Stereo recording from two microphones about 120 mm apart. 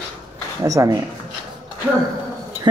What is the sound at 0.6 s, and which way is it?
Speech, 30° right (ahead or behind).